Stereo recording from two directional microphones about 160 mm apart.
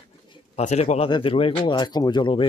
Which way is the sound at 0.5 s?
45° left (ahead or behind).